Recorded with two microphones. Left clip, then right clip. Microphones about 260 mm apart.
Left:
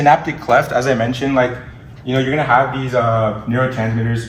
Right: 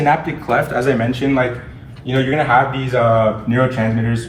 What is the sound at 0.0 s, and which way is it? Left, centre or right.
A man's voice, left.